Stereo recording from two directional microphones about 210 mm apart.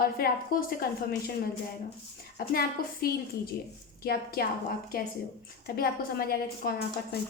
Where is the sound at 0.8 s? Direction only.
45° left (ahead or behind).